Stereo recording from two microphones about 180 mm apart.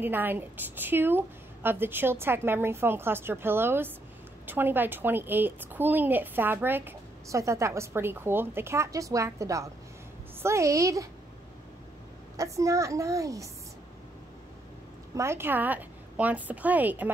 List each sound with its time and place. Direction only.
0.0 s a woman's voice: 10° right (ahead or behind)
12.4 s a woman's voice: 15° right (ahead or behind)
15.1 s a woman's voice: 15° right (ahead or behind)